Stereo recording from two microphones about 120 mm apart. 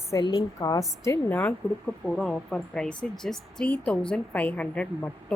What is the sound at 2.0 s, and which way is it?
A woman's voice, 5° left (ahead or behind).